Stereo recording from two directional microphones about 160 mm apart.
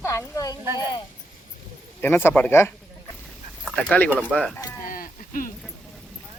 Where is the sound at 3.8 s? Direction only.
10° left (ahead or behind).